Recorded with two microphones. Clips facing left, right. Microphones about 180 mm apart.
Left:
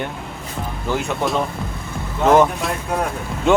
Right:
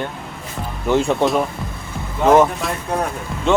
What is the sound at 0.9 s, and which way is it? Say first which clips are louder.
Speech: right 7 dB; 25° right (ahead or behind).